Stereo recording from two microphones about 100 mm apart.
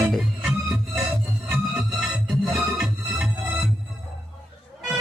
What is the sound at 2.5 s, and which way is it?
Music, centre (ahead or behind).